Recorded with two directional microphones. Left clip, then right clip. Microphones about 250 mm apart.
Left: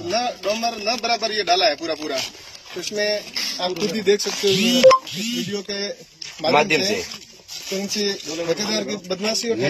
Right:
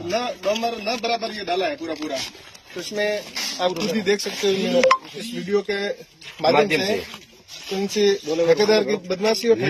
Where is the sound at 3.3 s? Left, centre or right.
Centre.